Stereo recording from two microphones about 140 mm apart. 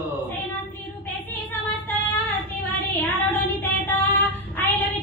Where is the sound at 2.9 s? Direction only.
15° left (ahead or behind).